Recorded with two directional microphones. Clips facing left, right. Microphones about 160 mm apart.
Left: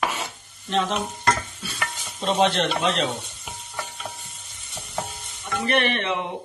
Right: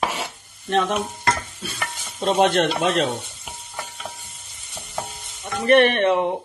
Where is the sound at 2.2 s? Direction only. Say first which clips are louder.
Right 3 dB; 50° right (ahead or behind).